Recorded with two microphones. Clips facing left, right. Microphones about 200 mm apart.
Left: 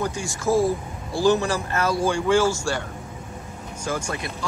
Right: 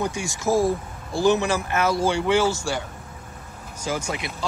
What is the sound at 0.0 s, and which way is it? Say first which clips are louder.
Speech: even; 20° right (ahead or behind).